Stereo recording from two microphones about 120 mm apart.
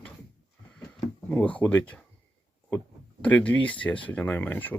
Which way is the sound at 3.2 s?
10° left (ahead or behind).